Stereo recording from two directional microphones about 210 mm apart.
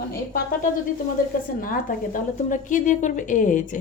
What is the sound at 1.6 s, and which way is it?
A woman's voice, 40° left (ahead or behind).